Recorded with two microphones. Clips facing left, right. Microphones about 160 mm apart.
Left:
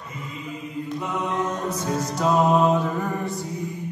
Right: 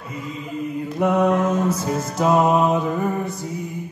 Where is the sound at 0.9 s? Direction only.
70° right (ahead or behind).